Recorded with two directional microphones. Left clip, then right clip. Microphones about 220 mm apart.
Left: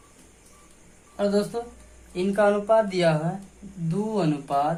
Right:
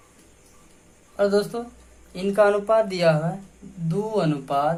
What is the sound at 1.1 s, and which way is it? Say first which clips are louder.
Speech: right 3 dB; 40° right (ahead or behind).